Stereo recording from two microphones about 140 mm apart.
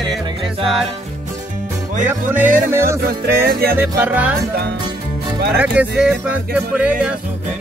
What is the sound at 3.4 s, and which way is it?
Music, 90° right.